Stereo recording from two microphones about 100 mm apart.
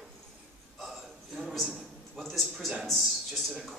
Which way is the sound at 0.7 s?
5° right (ahead or behind).